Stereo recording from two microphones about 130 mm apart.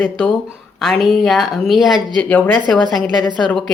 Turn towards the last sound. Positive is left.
turn(degrees=0)  # may be behind; listen again after turning